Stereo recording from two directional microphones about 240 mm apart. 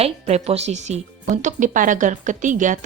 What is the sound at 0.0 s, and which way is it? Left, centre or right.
Speech, right.